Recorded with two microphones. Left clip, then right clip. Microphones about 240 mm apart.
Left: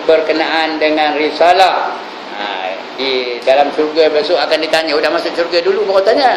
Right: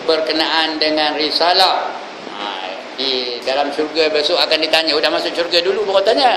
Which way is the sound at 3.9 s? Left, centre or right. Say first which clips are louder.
Left 3 dB; centre.